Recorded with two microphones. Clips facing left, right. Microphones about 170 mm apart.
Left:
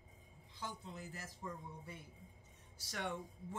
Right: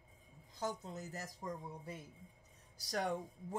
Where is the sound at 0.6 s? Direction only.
40° right (ahead or behind).